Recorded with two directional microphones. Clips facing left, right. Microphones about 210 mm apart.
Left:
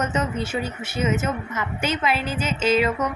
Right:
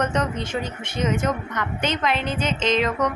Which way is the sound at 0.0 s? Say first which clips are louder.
Right 1 dB; 5° left (ahead or behind).